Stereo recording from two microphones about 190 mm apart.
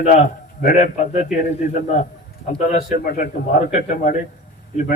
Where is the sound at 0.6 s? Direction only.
40° left (ahead or behind).